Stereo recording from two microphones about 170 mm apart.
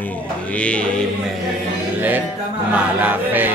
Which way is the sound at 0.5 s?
5° left (ahead or behind).